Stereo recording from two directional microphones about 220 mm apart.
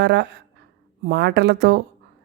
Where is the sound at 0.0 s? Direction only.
50° right (ahead or behind).